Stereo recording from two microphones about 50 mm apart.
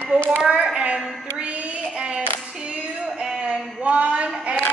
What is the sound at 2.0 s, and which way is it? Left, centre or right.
Clapping, centre.